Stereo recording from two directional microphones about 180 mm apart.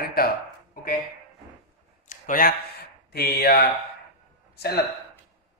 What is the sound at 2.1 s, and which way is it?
A man's voice, 50° left (ahead or behind).